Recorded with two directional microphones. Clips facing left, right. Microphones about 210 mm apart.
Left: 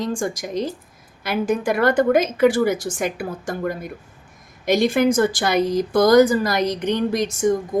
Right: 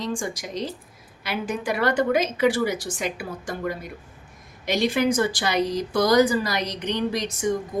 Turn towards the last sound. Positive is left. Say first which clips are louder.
# left 5 dB
turn(degrees=50)  # may be behind; listen again after turning